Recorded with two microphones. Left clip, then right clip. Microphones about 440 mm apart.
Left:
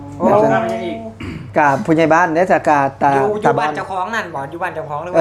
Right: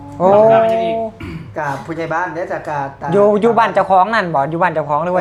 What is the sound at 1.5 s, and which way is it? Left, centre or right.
Speech, left.